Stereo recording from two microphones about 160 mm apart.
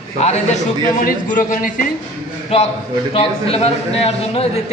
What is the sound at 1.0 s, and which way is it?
Speech, 55° left (ahead or behind).